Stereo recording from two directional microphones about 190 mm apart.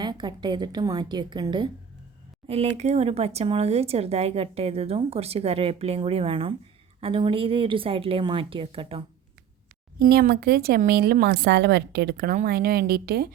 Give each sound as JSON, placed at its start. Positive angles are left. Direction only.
{"t": 0.0, "sound": "a woman's voice", "side_deg": -25}
{"t": 2.5, "sound": "a woman's voice", "side_deg": -35}
{"t": 10.0, "sound": "a woman's voice", "side_deg": -55}